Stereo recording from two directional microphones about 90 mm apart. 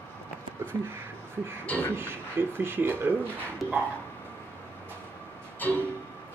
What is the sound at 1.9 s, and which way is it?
Speech, 25° right (ahead or behind).